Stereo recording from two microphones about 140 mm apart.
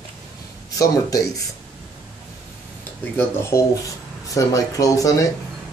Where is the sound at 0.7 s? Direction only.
25° left (ahead or behind).